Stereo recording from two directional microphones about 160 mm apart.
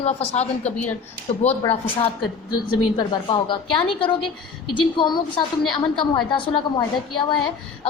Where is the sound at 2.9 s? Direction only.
30° left (ahead or behind).